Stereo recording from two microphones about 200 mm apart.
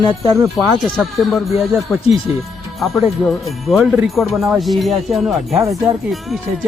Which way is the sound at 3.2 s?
Centre (ahead or behind).